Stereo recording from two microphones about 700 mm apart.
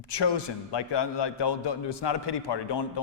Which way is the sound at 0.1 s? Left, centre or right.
Left.